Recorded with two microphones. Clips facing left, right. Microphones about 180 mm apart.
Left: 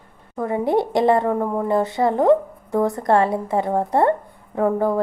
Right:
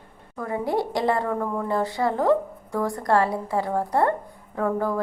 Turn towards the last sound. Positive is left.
turn(degrees=20)  # may be behind; listen again after turning